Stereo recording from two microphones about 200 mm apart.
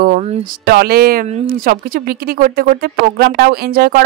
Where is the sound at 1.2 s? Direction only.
40° right (ahead or behind).